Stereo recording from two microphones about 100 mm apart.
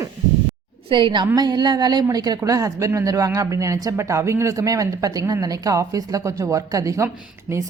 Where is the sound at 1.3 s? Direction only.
45° right (ahead or behind).